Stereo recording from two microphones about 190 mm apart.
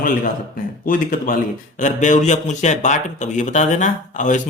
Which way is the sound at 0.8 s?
45° left (ahead or behind).